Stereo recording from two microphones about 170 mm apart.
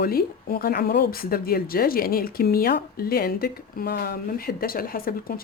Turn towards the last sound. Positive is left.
turn(degrees=60)  # may be behind; listen again after turning